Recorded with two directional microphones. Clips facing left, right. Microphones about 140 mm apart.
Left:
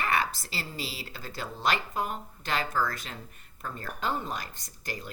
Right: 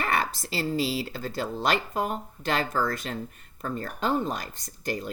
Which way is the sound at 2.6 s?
35° right (ahead or behind).